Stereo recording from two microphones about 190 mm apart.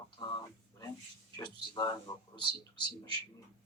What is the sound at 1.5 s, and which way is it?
Speech, 20° left (ahead or behind).